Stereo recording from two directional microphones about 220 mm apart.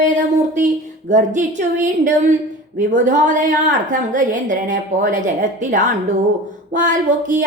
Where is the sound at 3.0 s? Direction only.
35° right (ahead or behind).